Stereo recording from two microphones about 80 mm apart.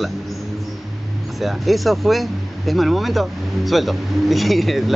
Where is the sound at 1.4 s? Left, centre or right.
Centre.